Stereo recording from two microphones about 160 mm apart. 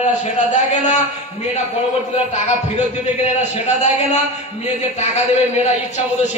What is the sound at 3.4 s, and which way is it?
Speech, 45° left (ahead or behind).